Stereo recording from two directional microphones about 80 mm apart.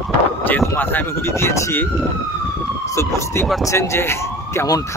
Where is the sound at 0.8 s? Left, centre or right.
Left.